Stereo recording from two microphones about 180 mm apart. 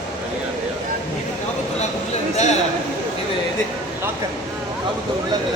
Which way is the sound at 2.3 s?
40° left (ahead or behind).